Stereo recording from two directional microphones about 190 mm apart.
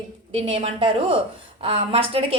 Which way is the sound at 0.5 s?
30° right (ahead or behind).